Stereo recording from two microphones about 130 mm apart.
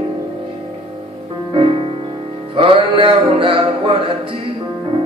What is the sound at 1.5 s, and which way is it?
Music, 45° right (ahead or behind).